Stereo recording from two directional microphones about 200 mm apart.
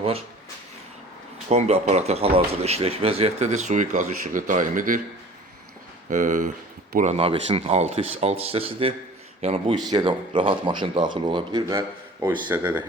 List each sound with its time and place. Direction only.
1.5 s speech: 35° right (ahead or behind)
6.1 s speech: 40° right (ahead or behind); by 12.5 s 20° right (ahead or behind)
12.5 s speech: 10° right (ahead or behind)